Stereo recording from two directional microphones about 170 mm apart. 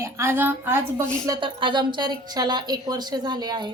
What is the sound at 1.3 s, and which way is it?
A woman's voice, 30° right (ahead or behind).